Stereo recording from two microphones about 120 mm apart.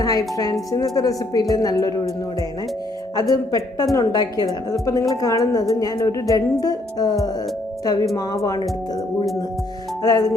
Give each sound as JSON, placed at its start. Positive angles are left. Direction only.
{"t": 0.0, "sound": "a woman's voice", "side_deg": 30}
{"t": 3.2, "sound": "a woman's voice", "side_deg": 30}
{"t": 10.0, "sound": "a woman's voice", "side_deg": 30}